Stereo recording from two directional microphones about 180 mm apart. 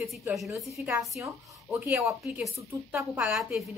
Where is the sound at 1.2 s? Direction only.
15° right (ahead or behind).